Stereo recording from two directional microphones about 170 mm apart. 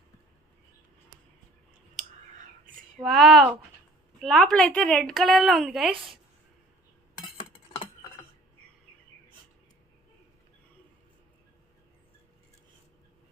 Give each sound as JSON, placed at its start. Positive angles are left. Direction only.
{"t": 3.0, "sound": "a woman's voice", "side_deg": 0}